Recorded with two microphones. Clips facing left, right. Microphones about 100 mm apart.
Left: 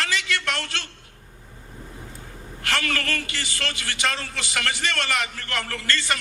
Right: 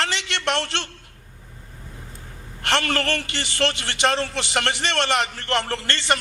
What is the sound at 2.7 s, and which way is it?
A man's voice, 30° right (ahead or behind).